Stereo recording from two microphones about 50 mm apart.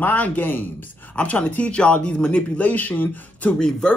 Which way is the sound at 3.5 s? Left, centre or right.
Centre.